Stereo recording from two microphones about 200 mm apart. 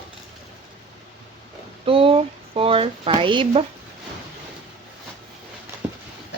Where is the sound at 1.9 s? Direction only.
30° right (ahead or behind).